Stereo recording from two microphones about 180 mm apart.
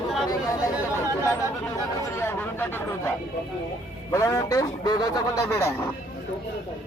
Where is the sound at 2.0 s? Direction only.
15° left (ahead or behind).